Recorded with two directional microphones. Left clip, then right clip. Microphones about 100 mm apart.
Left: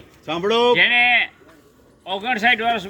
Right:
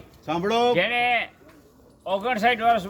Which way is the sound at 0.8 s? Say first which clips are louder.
Left 7 dB; 50° right (ahead or behind).